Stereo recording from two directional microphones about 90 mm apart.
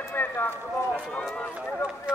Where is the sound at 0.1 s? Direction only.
25° left (ahead or behind).